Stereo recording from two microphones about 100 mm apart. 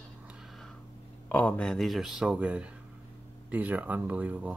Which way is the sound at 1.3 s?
15° left (ahead or behind).